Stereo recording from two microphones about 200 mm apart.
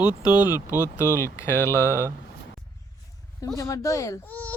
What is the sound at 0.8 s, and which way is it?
Speech, 10° right (ahead or behind).